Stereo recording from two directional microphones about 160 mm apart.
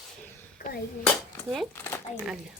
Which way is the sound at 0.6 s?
60° left (ahead or behind).